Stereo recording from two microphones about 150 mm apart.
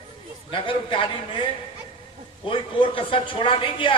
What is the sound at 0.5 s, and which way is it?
Speech, 35° left (ahead or behind).